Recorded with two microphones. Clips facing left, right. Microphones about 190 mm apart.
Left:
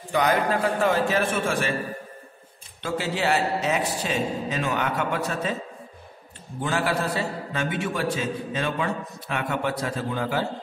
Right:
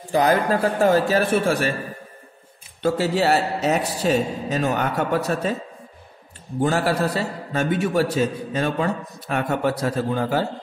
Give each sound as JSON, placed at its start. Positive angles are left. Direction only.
{"t": 0.1, "sound": "a man's voice", "side_deg": -35}
{"t": 2.8, "sound": "a man's voice", "side_deg": -40}
{"t": 6.6, "sound": "a man's voice", "side_deg": -40}